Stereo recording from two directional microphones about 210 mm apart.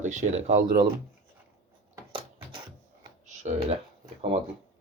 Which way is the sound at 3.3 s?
35° right (ahead or behind).